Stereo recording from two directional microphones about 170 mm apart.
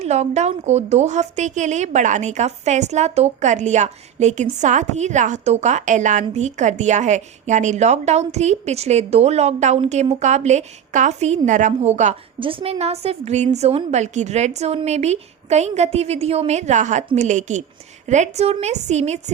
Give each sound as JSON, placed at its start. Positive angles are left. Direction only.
{"t": 0.0, "sound": "a woman's voice", "side_deg": -40}
{"t": 12.4, "sound": "a woman's voice", "side_deg": -30}